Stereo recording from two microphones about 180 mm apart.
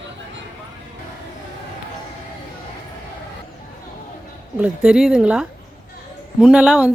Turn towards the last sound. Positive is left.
turn(degrees=-5)  # may be behind; listen again after turning